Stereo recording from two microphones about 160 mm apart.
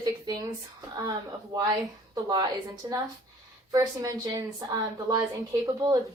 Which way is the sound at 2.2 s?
30° right (ahead or behind).